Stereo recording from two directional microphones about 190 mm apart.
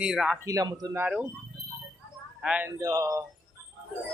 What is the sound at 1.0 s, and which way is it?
Speech, 5° right (ahead or behind).